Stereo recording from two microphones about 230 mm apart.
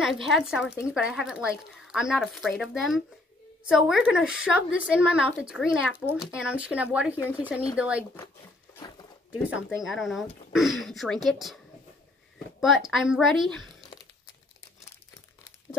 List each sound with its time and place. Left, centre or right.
0.0 s speech: centre
8.7 s a sound: centre
9.3 s speech: centre